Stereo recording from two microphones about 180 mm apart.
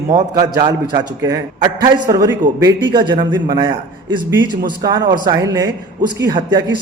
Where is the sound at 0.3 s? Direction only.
25° right (ahead or behind).